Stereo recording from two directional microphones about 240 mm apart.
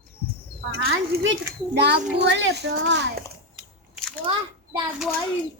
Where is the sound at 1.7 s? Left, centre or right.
Right.